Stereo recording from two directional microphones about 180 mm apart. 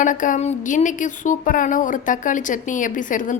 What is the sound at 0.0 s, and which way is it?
Speech, 45° left (ahead or behind).